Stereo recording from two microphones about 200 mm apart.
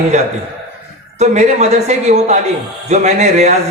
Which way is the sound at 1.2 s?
35° right (ahead or behind).